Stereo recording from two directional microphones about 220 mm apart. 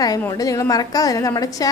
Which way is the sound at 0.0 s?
15° left (ahead or behind).